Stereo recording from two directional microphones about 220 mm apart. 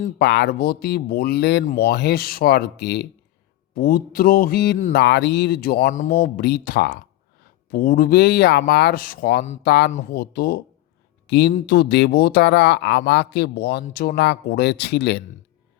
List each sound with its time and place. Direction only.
0.2 s speech: 50° left (ahead or behind)